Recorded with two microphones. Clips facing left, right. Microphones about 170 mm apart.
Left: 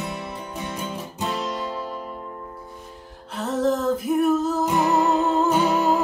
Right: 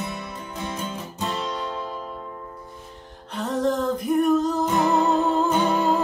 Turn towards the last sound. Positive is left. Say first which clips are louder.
# left 1 dB
turn(degrees=5)  # may be behind; listen again after turning